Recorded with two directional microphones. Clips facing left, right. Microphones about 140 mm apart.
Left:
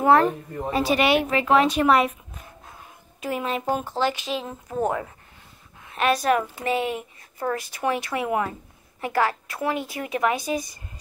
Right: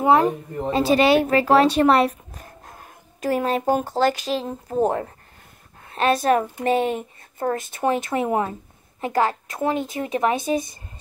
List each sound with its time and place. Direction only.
0.7 s a woman's voice: 30° right (ahead or behind)
7.5 s speech: 25° right (ahead or behind)